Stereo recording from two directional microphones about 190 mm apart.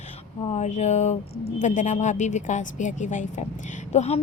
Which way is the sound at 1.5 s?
40° left (ahead or behind).